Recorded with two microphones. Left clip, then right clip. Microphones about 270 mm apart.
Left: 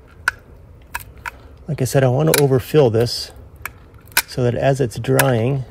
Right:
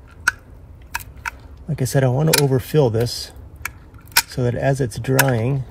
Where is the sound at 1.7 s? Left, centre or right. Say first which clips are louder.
Left 3 dB; left.